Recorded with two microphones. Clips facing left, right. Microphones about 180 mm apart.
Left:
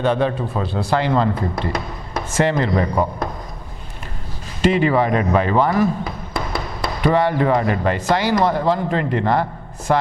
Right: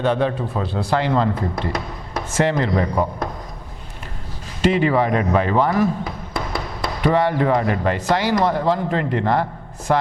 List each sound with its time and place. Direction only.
0.0 s speech: 15° left (ahead or behind)
4.6 s speech: 15° left (ahead or behind)